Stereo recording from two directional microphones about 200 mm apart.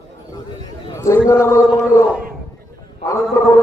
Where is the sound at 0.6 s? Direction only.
20° left (ahead or behind).